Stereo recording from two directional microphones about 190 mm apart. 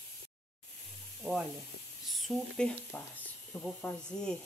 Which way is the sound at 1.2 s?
Centre (ahead or behind).